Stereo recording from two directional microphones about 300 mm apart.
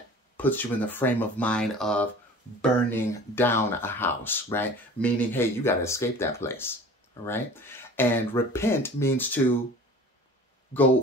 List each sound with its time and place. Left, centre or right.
0.4 s speech: centre